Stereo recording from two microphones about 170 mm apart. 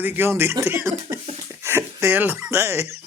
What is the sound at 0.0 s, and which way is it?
Speech, 10° right (ahead or behind).